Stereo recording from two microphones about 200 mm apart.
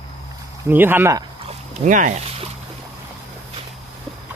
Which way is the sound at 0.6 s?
10° right (ahead or behind).